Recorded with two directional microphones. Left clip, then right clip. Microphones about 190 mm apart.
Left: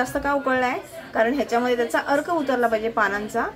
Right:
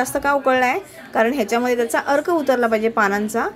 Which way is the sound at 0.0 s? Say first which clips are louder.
Right 5 dB; 40° right (ahead or behind).